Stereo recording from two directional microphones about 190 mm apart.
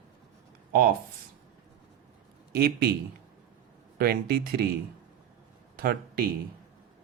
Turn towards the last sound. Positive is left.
turn(degrees=-55)  # may be behind; listen again after turning